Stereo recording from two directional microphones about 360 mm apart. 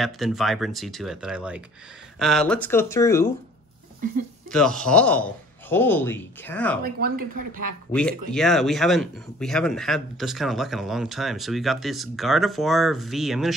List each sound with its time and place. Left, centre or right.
0.0 s speech: centre
4.5 s speech: centre
7.2 s speech: right
8.3 s speech: centre